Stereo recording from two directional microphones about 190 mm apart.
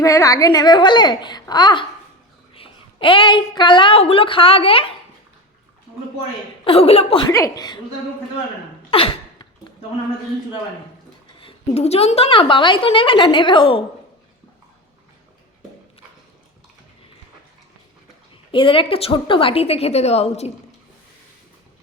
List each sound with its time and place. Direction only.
0.0 s a woman's voice: 15° left (ahead or behind)
6.7 s a woman's voice: 30° left (ahead or behind)
7.3 s a woman's voice: 15° left (ahead or behind)
8.9 s sneeze: 30° left (ahead or behind)
11.3 s a woman's voice: 30° left (ahead or behind)
18.5 s a woman's voice: 25° left (ahead or behind)